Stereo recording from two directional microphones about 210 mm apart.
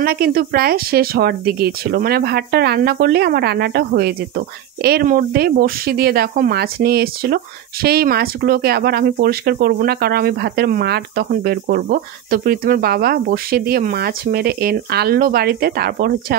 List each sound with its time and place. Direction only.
0.0 s speech: 45° right (ahead or behind)